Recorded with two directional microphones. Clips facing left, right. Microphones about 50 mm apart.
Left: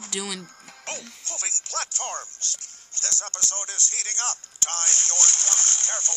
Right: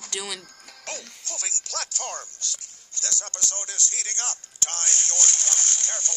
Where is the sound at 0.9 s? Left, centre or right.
Left.